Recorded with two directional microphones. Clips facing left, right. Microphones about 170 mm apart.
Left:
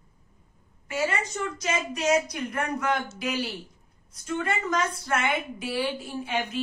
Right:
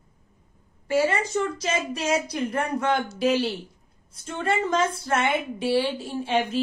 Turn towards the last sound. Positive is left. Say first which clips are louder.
# right 5 dB
turn(degrees=-30)  # may be behind; listen again after turning